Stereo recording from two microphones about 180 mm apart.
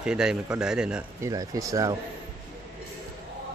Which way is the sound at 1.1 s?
15° right (ahead or behind).